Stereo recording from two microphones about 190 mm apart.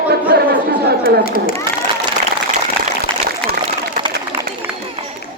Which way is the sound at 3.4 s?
5° left (ahead or behind).